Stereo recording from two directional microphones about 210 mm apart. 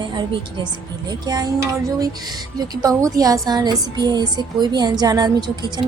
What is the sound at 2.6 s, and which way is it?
A woman's voice, 15° right (ahead or behind).